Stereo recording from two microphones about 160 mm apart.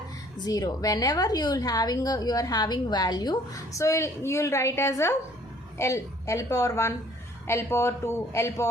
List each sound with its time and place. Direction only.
0.3 s a woman's voice: 25° left (ahead or behind)